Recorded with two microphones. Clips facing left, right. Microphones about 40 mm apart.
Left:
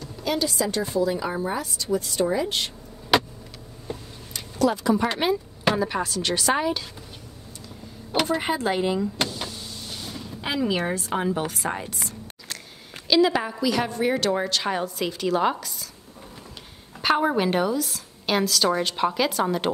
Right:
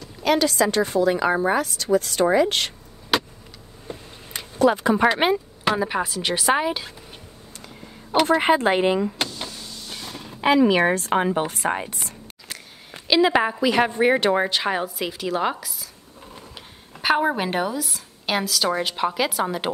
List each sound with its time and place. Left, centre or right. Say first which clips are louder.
0.2 s a woman's voice: right 6 dB; right
3.1 s vehicle: left 2 dB; centre
3.8 s a sound: left 1 dB; right
5.8 s speech: right 1 dB; centre
8.3 s speech: right 9 dB; right
9.8 s a sound: right 1 dB; right
10.8 s speech: right 6 dB; right
13.3 s a woman's voice: right 5 dB; right; by 15.9 s centre
17.0 s speech: right 1 dB; centre